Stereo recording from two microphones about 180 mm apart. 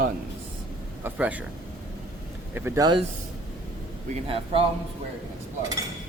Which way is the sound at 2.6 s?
15° right (ahead or behind).